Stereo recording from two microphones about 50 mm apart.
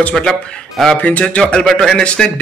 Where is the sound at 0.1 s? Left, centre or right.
Centre.